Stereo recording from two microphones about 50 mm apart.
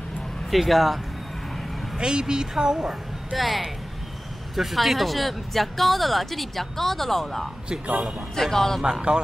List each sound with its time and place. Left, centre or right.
0.5 s speech: centre
2.0 s a woman's voice: centre
3.3 s speech: centre
7.8 s a man's voice: right
8.4 s speech: centre